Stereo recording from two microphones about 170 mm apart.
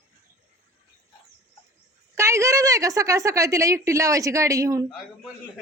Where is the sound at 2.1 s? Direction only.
15° right (ahead or behind).